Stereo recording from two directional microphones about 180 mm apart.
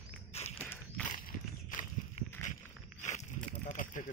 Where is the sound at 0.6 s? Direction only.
10° left (ahead or behind).